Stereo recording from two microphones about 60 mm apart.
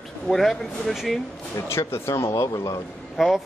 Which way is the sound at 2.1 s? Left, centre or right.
Left.